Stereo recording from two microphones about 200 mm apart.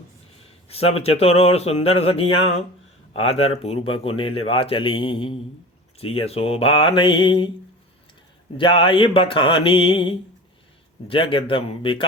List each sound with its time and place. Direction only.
0.4 s speech: 30° left (ahead or behind)
8.5 s speech: 25° left (ahead or behind)